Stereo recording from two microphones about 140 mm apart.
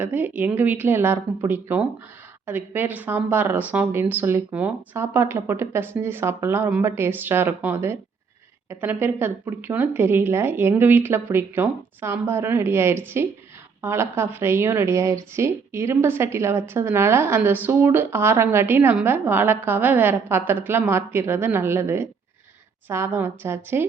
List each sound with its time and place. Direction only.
0.0 s a woman's voice: 15° right (ahead or behind)